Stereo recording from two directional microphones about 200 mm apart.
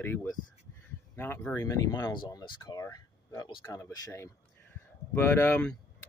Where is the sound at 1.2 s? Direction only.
10° left (ahead or behind).